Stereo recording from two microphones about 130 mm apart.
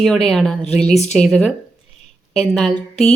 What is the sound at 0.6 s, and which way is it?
Speech, 55° left (ahead or behind).